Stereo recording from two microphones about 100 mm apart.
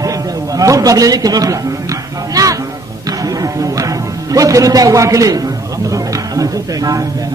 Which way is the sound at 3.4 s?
35° right (ahead or behind).